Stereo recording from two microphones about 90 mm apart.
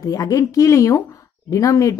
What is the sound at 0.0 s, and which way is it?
Speech, 40° left (ahead or behind).